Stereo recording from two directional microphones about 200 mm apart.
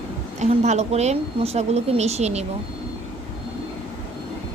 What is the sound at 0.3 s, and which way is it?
Speech, 35° right (ahead or behind).